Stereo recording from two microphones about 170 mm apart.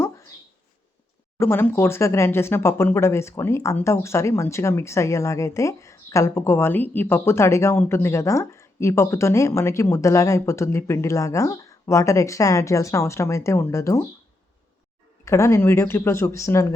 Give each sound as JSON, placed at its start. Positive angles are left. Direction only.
{"t": 0.0, "sound": "a sound", "side_deg": 20}
{"t": 1.4, "sound": "speech", "side_deg": 15}
{"t": 15.2, "sound": "speech", "side_deg": 15}